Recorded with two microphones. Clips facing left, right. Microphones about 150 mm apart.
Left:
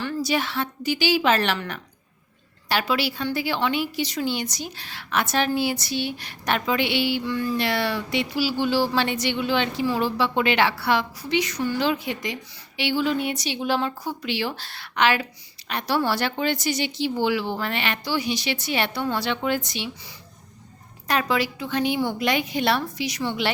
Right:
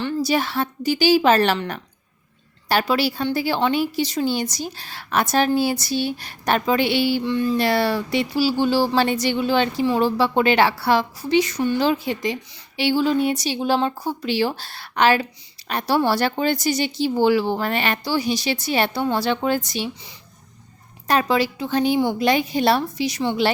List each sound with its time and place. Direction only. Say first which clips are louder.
0.3 s speech: right 4 dB; 40° right (ahead or behind)
2.6 s speech: right 4 dB; 40° right (ahead or behind)
7.3 s a sound: right 5 dB; 25° right (ahead or behind)
7.6 s speech: right 5 dB; 40° right (ahead or behind)
21.1 s speech: right 4 dB; 30° right (ahead or behind)